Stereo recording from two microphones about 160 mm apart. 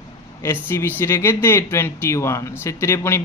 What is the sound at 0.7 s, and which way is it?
Speech, 15° left (ahead or behind).